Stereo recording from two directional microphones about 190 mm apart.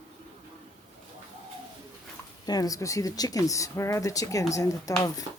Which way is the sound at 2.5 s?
20° left (ahead or behind).